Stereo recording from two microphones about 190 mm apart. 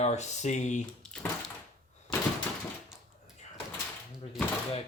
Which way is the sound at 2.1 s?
Centre (ahead or behind).